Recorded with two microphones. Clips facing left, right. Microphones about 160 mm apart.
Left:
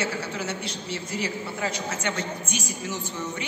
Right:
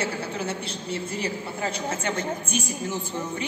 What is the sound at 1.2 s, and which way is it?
Speech, 30° right (ahead or behind).